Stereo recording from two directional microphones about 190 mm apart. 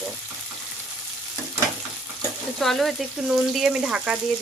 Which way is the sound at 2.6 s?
Centre (ahead or behind).